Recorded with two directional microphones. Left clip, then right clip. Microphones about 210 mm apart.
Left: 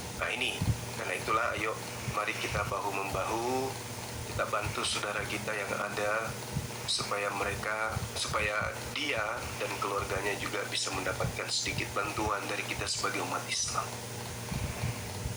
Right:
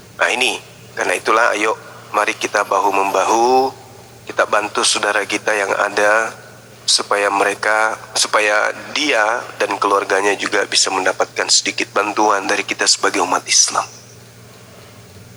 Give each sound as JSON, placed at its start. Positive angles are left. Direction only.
{"t": 0.2, "sound": "speech", "side_deg": -50}